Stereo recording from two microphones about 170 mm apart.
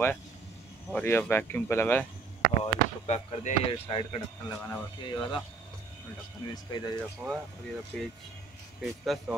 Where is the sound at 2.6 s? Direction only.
40° left (ahead or behind).